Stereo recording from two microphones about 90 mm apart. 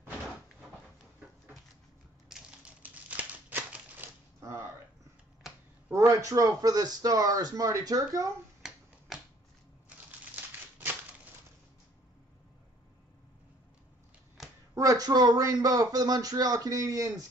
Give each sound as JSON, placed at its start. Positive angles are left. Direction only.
{"t": 2.2, "sound": "typewriter", "side_deg": -5}
{"t": 2.8, "sound": "crumpling", "side_deg": -15}
{"t": 4.4, "sound": "a sound", "side_deg": -35}
{"t": 5.9, "sound": "speech", "side_deg": -35}
{"t": 8.6, "sound": "finger snapping", "side_deg": 0}
{"t": 9.8, "sound": "a sound", "side_deg": -20}
{"t": 14.7, "sound": "speech", "side_deg": -40}